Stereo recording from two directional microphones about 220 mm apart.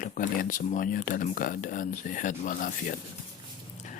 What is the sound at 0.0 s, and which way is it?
Speech, 35° left (ahead or behind).